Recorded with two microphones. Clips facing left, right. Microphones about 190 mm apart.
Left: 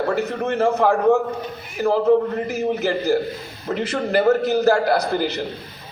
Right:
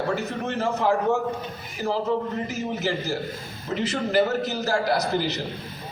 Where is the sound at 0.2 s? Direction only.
55° left (ahead or behind).